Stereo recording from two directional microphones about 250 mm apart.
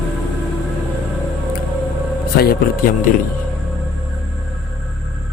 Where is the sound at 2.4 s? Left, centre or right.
Left.